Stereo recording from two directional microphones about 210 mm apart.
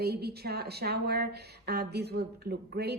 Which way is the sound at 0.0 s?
50° right (ahead or behind).